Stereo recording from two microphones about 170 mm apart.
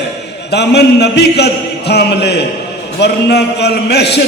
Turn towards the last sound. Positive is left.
turn(degrees=80)